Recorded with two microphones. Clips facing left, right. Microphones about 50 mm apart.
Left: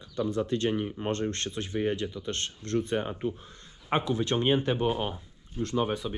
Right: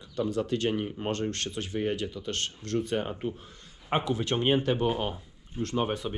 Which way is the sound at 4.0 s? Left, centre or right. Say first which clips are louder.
Left 1 dB; right.